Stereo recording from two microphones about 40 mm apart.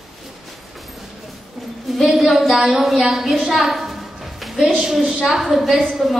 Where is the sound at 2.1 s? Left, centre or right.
Centre.